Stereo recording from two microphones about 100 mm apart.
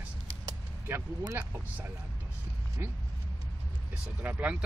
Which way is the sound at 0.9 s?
25° right (ahead or behind).